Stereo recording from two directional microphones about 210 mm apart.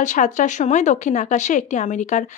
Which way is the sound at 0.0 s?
35° left (ahead or behind).